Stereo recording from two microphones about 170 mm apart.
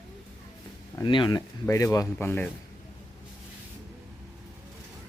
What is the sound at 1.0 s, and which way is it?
Speech, 30° left (ahead or behind).